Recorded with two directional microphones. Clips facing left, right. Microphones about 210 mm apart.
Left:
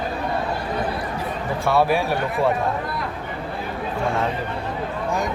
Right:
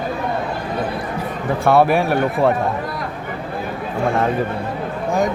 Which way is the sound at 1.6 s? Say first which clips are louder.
Right 5 dB; 55° right (ahead or behind).